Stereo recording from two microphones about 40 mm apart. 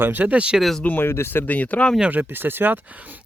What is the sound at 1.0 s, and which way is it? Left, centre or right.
Speech, left.